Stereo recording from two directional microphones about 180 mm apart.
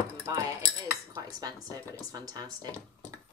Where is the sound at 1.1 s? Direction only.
20° right (ahead or behind).